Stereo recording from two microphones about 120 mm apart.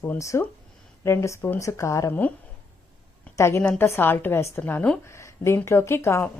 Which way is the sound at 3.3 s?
20° left (ahead or behind).